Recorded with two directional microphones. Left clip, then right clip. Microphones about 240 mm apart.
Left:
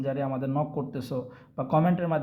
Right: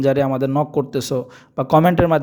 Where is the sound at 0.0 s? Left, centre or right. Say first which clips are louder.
Right 13 dB; right.